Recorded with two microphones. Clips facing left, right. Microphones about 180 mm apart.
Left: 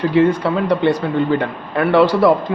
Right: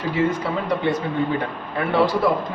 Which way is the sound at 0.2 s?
70° left (ahead or behind).